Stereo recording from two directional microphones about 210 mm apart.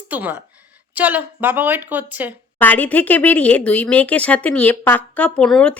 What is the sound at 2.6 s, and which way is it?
Speech, 10° left (ahead or behind).